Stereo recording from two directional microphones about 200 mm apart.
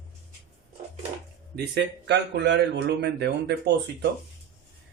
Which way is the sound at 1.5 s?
60° right (ahead or behind).